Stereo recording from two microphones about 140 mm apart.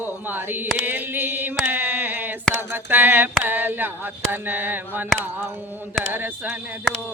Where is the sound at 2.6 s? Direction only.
15° right (ahead or behind).